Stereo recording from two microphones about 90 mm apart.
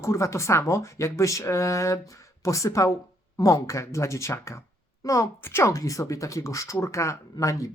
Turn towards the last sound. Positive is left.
turn(degrees=35)  # may be behind; listen again after turning